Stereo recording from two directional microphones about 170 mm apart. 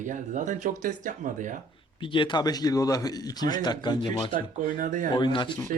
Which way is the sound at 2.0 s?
30° left (ahead or behind).